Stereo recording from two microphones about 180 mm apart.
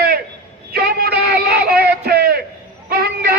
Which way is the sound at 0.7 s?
60° right (ahead or behind).